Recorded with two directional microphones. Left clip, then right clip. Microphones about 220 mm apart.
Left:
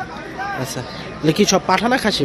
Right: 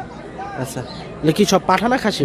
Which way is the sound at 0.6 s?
5° right (ahead or behind).